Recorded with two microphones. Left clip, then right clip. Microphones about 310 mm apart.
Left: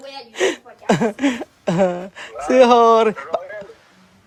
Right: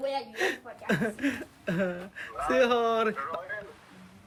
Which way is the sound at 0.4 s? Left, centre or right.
Centre.